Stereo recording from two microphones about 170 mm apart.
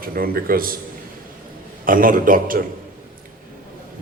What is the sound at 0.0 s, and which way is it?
Speech, 60° right (ahead or behind).